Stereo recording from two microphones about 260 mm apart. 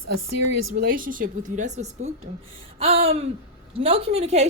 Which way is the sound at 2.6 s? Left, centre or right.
Right.